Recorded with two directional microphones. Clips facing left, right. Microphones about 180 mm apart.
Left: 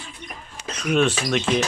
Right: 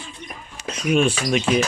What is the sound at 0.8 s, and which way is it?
Speech, 10° right (ahead or behind).